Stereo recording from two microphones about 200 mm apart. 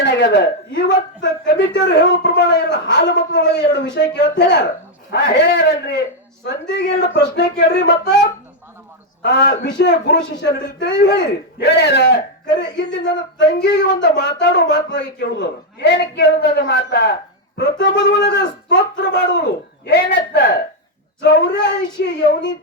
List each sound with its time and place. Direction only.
0.0 s speech: 55° left (ahead or behind)
9.2 s speech: 55° left (ahead or behind)